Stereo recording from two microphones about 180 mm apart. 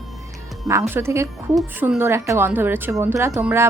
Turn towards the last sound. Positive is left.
turn(degrees=-15)  # may be behind; listen again after turning